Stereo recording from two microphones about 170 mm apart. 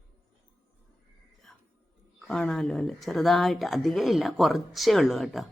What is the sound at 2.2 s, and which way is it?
Speech, 5° left (ahead or behind).